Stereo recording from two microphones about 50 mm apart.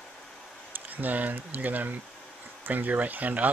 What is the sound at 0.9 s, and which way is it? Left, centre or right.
Speech, right.